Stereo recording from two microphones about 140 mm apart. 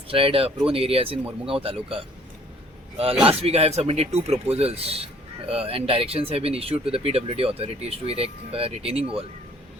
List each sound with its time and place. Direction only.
0.1 s speech: 40° right (ahead or behind)
3.2 s speech: 45° right (ahead or behind)